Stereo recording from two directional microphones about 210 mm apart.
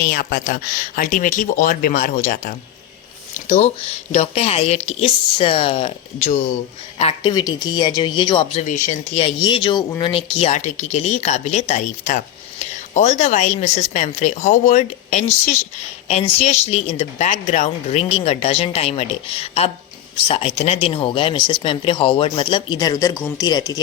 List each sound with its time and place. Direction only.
0.0 s speech: 45° left (ahead or behind); by 23.8 s 20° left (ahead or behind)